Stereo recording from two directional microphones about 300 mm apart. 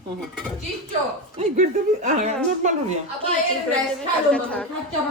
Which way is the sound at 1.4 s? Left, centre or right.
Right.